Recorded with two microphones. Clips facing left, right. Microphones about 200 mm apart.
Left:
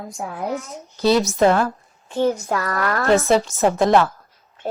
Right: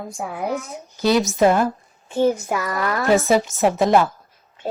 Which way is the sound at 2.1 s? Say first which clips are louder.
Right 1 dB; 15° right (ahead or behind).